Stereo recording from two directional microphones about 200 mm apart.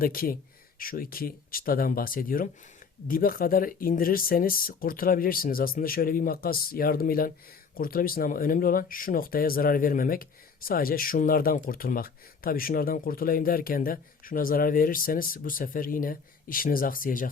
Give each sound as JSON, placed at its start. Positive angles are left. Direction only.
{"t": 0.0, "sound": "speech", "side_deg": 45}